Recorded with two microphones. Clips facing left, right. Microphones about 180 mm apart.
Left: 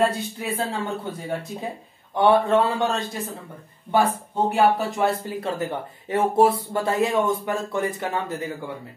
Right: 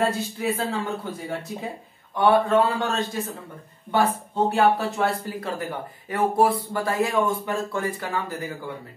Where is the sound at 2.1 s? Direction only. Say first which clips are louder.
Left 1 dB; 25° left (ahead or behind).